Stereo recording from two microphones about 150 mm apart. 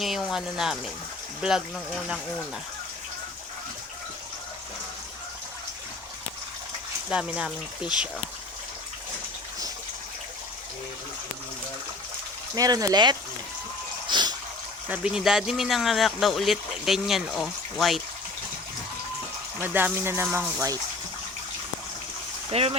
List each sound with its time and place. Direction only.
0.0 s speech: centre (ahead or behind)
7.1 s speech: 5° right (ahead or behind)
12.5 s speech: 25° right (ahead or behind)
14.1 s water: 30° right (ahead or behind)
14.8 s speech: 10° right (ahead or behind)
19.6 s speech: 15° right (ahead or behind)
22.5 s speech: 45° right (ahead or behind)